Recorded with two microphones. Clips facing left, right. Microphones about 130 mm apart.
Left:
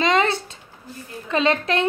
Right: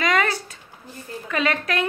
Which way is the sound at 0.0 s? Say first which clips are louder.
Left 3 dB; 25° left (ahead or behind).